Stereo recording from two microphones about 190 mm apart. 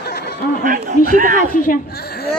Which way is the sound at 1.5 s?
45° left (ahead or behind).